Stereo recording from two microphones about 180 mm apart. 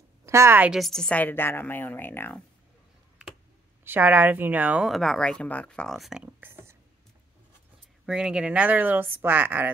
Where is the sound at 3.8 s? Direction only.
10° right (ahead or behind).